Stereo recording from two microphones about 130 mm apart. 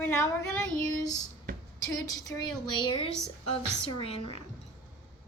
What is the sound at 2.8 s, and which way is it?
Speech, 40° left (ahead or behind).